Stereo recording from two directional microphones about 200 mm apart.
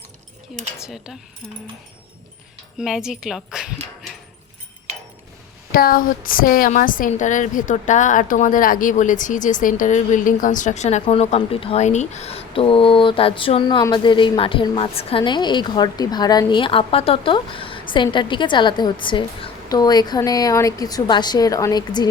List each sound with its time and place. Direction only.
0.8 s speech: 5° right (ahead or behind)
2.7 s speech: 5° right (ahead or behind)
5.7 s a woman's voice: 45° left (ahead or behind); by 22.0 s 20° left (ahead or behind)